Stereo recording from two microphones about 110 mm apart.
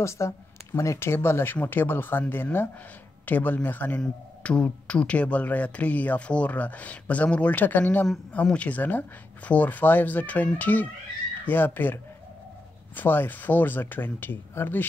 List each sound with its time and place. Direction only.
0.0 s speech: 25° left (ahead or behind)